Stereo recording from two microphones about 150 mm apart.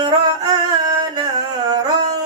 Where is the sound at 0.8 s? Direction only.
25° right (ahead or behind).